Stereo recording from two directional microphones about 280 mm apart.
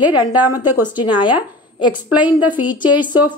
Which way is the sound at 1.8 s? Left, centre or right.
Centre.